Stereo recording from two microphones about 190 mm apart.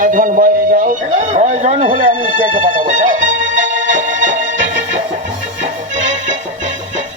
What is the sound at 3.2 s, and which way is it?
Music, 90° right.